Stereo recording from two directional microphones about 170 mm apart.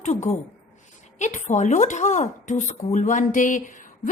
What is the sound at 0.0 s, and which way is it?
Speech, 45° left (ahead or behind).